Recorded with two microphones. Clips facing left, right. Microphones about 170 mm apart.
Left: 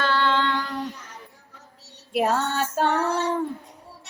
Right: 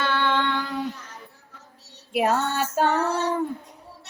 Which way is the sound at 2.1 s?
5° right (ahead or behind).